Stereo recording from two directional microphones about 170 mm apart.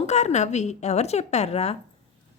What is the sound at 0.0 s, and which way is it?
A woman's voice, 40° left (ahead or behind).